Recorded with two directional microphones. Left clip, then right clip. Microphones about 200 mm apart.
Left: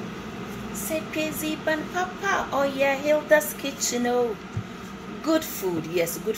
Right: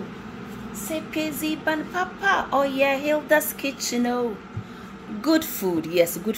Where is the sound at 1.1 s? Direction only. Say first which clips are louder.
Right 1 dB; 45° right (ahead or behind).